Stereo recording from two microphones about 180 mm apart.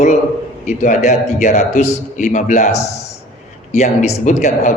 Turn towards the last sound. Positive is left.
turn(degrees=45)  # may be behind; listen again after turning